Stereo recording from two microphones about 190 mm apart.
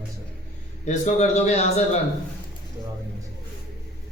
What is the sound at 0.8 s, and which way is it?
Speech, 40° left (ahead or behind).